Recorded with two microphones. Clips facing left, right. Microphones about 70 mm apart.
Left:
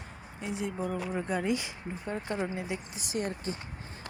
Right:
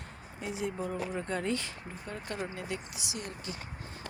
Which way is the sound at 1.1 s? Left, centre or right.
Centre.